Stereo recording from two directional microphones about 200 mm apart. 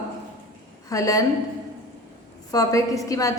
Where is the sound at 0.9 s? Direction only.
15° left (ahead or behind).